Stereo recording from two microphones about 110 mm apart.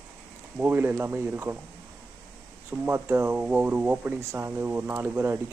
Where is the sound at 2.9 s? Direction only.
25° right (ahead or behind).